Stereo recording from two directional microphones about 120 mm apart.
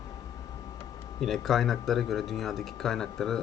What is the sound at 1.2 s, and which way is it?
Speech, centre (ahead or behind).